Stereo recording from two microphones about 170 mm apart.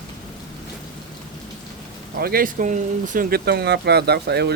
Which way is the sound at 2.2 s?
60° right (ahead or behind).